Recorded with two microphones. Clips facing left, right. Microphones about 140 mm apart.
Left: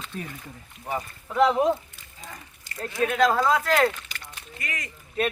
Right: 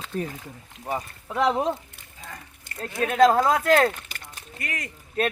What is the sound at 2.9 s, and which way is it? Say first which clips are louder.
Speech: right 3 dB; 45° right (ahead or behind).